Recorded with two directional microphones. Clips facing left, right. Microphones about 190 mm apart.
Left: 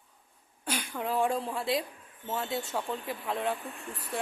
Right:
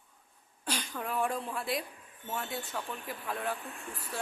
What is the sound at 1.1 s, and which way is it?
A woman's voice, 30° left (ahead or behind).